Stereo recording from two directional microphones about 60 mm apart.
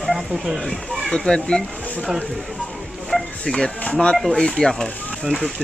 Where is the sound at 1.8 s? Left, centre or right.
Centre.